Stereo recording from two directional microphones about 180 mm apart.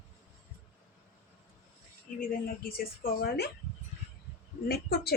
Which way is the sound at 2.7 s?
55° left (ahead or behind).